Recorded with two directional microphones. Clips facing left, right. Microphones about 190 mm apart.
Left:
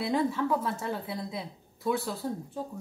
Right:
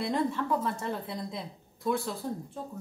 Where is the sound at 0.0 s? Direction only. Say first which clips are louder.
Left 2 dB; 5° left (ahead or behind).